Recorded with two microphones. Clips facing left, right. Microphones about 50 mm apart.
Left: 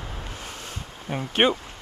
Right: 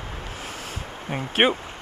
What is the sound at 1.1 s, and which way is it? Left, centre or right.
Speech, centre.